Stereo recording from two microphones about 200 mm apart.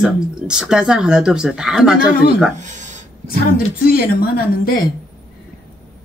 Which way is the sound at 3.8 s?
45° left (ahead or behind).